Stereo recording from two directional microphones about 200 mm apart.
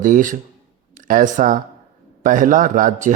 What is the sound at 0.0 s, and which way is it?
Speech, 40° right (ahead or behind).